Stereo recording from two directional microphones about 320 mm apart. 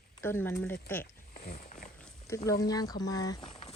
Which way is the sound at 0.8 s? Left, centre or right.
Centre.